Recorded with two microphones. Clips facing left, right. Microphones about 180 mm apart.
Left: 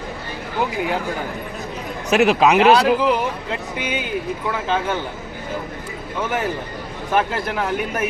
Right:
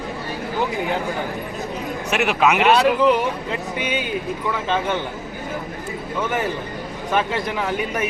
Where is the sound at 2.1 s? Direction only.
35° left (ahead or behind).